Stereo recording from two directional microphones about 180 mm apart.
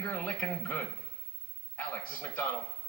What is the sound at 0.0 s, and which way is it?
Speech, 10° left (ahead or behind).